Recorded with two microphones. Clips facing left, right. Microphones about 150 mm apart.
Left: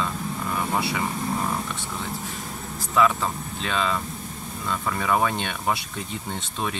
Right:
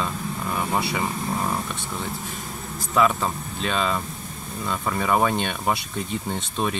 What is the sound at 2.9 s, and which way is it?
Speech, 20° right (ahead or behind).